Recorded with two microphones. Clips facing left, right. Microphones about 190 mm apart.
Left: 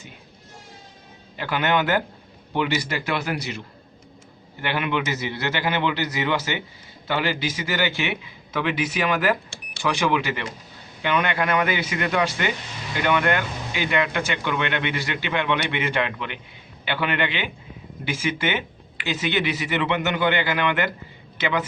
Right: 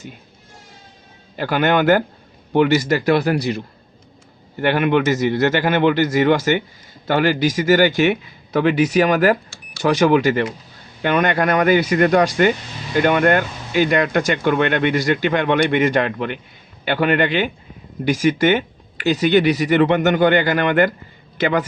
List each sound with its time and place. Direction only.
1.4 s a man's voice: 45° right (ahead or behind)
4.6 s a man's voice: 50° right (ahead or behind)